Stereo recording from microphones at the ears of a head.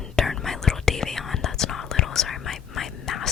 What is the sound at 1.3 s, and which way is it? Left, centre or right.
Whispering, left.